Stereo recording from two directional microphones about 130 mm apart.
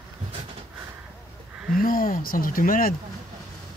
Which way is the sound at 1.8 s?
90° left.